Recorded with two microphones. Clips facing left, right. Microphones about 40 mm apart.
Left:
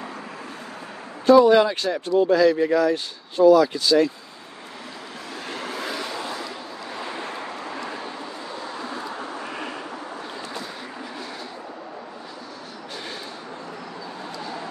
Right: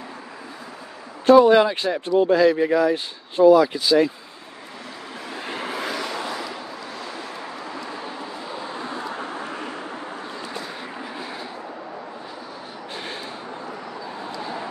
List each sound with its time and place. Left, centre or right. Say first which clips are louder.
1.2 s speech: right 1 dB; right
1.5 s speech: right 1 dB; centre
5.4 s vehicle: right 2 dB; centre
6.9 s vehicle: left 2 dB; centre